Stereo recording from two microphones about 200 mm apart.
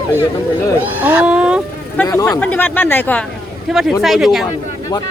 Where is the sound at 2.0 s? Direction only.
10° left (ahead or behind).